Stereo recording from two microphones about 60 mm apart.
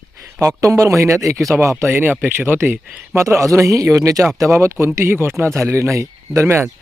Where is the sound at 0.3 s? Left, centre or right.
Right.